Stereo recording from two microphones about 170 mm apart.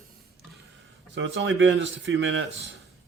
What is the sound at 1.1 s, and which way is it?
Speech, 90° right.